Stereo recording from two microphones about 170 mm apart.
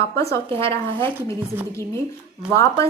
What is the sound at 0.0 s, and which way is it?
Speech, 15° left (ahead or behind).